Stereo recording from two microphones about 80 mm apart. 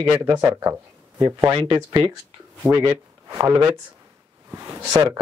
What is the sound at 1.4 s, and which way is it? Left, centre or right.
Speech, right.